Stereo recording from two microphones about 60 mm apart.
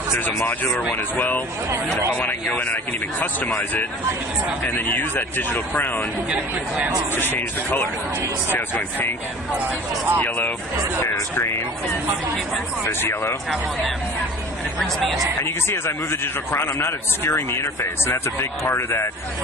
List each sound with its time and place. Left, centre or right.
0.4 s a man's voice: left
4.6 s speech: left
6.3 s speech: right
7.2 s speech: left
10.2 s a man's voice: left
11.0 s a man's voice: left
12.8 s speech: left
14.8 s speech: centre
15.4 s a man's voice: left